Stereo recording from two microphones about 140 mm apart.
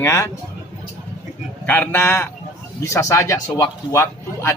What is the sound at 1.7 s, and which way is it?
A man's voice, 15° left (ahead or behind).